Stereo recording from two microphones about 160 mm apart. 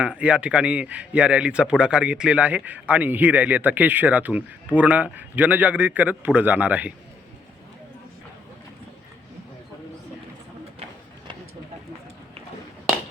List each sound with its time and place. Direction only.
0.0 s speech: 5° right (ahead or behind)